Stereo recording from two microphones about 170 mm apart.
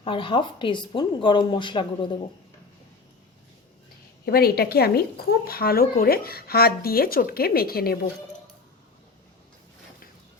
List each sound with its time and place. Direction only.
0.0 s a woman's voice: 30° left (ahead or behind)
4.3 s speech: 65° left (ahead or behind)